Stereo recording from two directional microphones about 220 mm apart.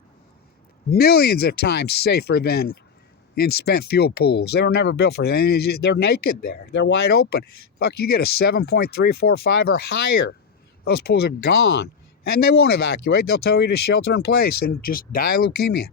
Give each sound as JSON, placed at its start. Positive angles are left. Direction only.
{"t": 0.9, "sound": "speech", "side_deg": 45}